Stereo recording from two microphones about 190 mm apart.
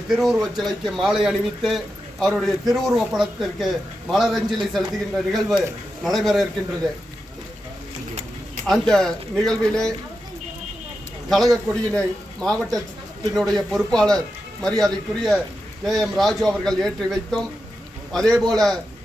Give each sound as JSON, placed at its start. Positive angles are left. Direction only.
{"t": 0.1, "sound": "a man's voice", "side_deg": 0}
{"t": 8.9, "sound": "a man's voice", "side_deg": 0}
{"t": 11.3, "sound": "a man's voice", "side_deg": 0}